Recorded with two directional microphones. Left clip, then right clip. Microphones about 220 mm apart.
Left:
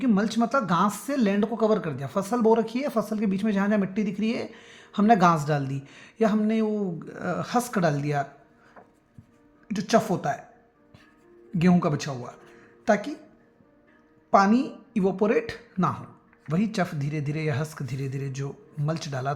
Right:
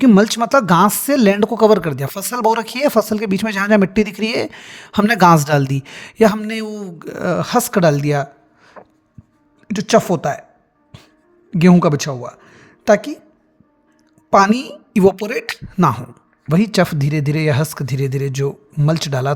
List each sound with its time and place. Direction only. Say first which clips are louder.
0.0 s speech: right 12 dB; 55° right (ahead or behind)
11.5 s a woman's voice: right 11 dB; 50° right (ahead or behind)
14.3 s a woman's voice: right 8 dB; 55° right (ahead or behind)